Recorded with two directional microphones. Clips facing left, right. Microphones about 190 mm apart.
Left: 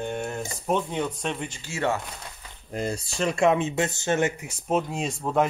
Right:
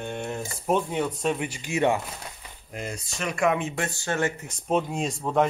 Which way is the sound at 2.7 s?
30° left (ahead or behind).